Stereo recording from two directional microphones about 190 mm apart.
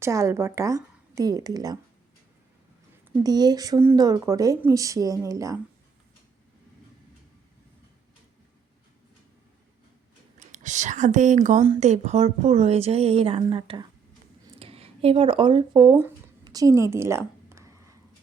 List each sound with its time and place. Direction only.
0.0 s speech: 15° right (ahead or behind)
3.2 s speech: 20° right (ahead or behind)
10.5 s a woman's voice: 40° right (ahead or behind); by 16.0 s 25° right (ahead or behind)
16.0 s a sound: 15° right (ahead or behind)